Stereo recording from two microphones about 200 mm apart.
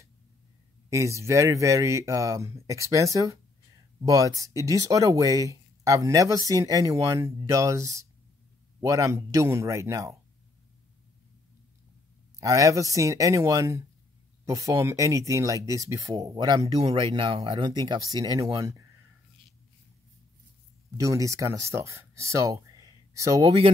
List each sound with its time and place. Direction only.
0.8 s speech: 15° right (ahead or behind)
4.4 s speech: 15° right (ahead or behind)
12.4 s speech: 15° right (ahead or behind)
21.0 s speech: 15° right (ahead or behind)